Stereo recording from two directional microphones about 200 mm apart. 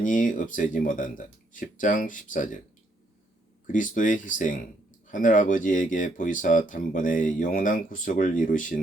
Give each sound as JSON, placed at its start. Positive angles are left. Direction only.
{"t": 0.0, "sound": "speech", "side_deg": 40}
{"t": 3.7, "sound": "speech", "side_deg": 40}